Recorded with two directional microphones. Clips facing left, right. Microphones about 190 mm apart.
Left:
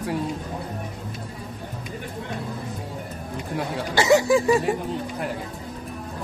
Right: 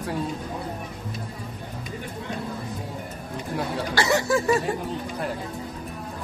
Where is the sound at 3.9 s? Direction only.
15° left (ahead or behind).